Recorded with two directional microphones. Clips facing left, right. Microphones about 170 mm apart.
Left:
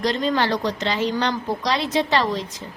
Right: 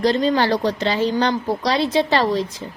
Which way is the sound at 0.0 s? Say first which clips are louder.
Right 4 dB; 35° right (ahead or behind).